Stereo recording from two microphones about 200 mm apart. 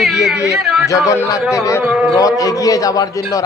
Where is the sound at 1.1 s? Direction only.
15° left (ahead or behind).